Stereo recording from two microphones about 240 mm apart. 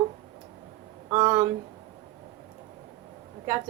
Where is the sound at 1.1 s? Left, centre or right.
Centre.